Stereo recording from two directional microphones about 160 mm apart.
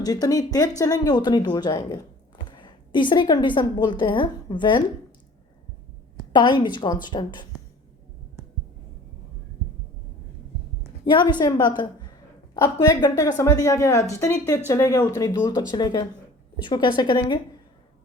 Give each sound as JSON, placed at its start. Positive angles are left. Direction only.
{"t": 0.0, "sound": "a woman's voice", "side_deg": 25}
{"t": 6.3, "sound": "a woman's voice", "side_deg": 30}
{"t": 11.0, "sound": "a woman's voice", "side_deg": 30}